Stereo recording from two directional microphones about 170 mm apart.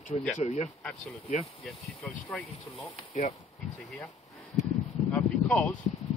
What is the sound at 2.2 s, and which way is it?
Speech, 15° left (ahead or behind).